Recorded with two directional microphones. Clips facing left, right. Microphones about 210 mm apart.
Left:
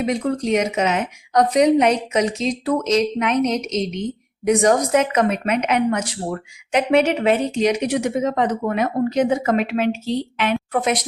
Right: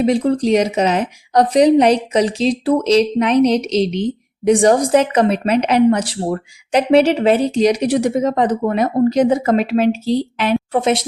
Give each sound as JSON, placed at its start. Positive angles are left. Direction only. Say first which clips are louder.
{"t": 0.0, "sound": "a woman's voice", "louder": "right 6 dB", "side_deg": -30}